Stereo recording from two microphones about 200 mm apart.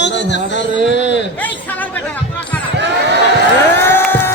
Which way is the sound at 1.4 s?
10° left (ahead or behind).